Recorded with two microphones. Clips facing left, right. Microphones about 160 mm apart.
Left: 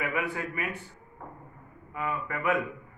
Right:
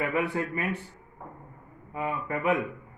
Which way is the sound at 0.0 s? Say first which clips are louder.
Right 4 dB; 30° right (ahead or behind).